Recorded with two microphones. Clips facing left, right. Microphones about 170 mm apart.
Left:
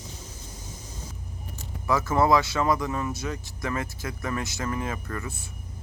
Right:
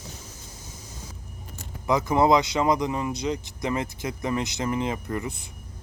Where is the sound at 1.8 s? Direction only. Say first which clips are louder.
Right 2 dB; 15° right (ahead or behind).